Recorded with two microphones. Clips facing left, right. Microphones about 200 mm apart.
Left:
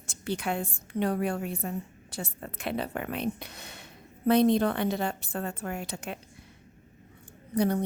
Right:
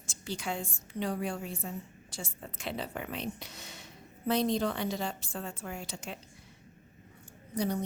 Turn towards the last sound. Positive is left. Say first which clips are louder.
# left 6 dB
turn(degrees=60)  # may be behind; listen again after turning